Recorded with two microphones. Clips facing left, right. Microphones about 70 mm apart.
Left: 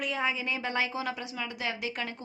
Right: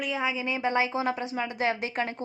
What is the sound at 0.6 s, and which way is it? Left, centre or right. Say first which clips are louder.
A woman's voice: right 7 dB; right.